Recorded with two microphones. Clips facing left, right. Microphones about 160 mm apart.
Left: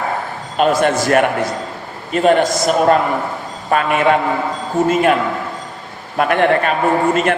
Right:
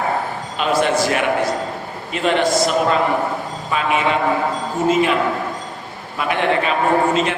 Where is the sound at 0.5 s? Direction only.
50° left (ahead or behind).